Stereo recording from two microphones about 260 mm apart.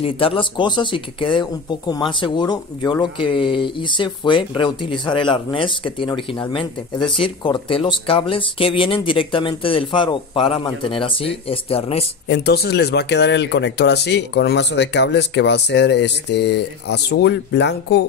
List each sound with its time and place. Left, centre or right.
0.0 s speech: centre
12.3 s speech: left